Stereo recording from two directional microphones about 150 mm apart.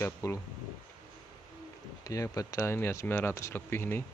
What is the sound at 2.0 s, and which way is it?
Speech, 25° left (ahead or behind).